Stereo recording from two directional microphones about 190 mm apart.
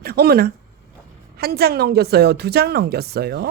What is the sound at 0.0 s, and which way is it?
A woman's voice, 55° right (ahead or behind).